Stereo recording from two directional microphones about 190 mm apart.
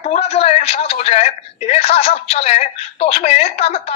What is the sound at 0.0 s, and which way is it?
Speech, 35° left (ahead or behind).